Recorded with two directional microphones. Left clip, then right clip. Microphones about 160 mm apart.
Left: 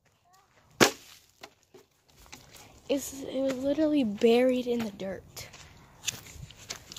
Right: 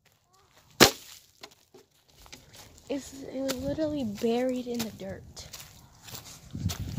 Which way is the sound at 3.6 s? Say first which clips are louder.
Left 4 dB; 55° left (ahead or behind).